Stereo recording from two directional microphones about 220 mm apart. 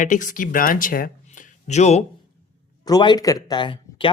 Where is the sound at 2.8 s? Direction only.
20° left (ahead or behind).